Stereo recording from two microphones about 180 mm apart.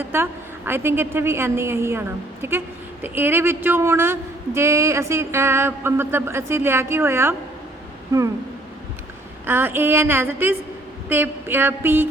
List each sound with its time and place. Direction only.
0.0 s a woman's voice: 10° right (ahead or behind)
9.5 s a woman's voice: 10° right (ahead or behind)